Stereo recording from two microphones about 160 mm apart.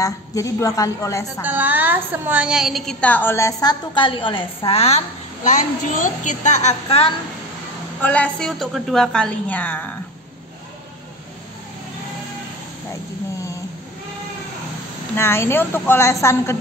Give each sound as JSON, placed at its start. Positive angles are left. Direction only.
{"t": 0.0, "sound": "a woman's voice", "side_deg": 20}
{"t": 1.4, "sound": "a woman's voice", "side_deg": -10}
{"t": 8.0, "sound": "a woman's voice", "side_deg": 10}
{"t": 15.1, "sound": "a woman's voice", "side_deg": 15}